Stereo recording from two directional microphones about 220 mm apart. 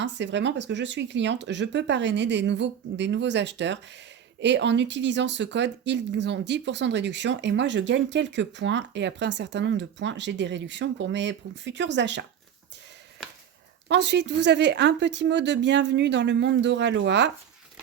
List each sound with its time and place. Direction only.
0.0 s speech: 55° right (ahead or behind)
13.8 s speech: 50° right (ahead or behind)